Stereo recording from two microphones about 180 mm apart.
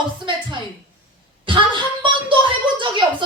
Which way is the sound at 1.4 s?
25° right (ahead or behind).